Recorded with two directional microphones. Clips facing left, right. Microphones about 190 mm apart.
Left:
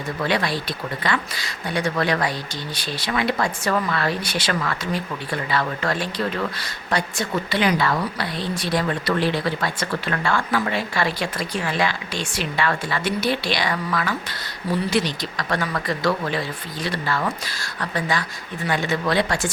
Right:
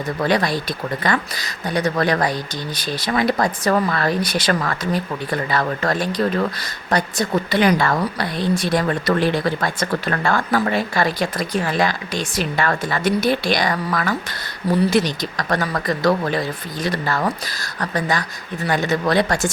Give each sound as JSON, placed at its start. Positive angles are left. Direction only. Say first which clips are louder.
{"t": 0.2, "sound": "speech", "louder": "right 4 dB", "side_deg": -45}